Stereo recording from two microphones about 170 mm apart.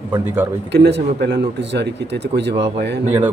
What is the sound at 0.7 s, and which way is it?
A man's voice, 85° right.